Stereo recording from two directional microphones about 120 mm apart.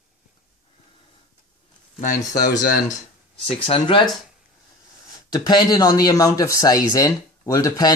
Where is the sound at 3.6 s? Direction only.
50° left (ahead or behind).